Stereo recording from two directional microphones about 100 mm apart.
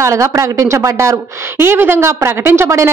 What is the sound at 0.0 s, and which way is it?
Speech, 30° right (ahead or behind).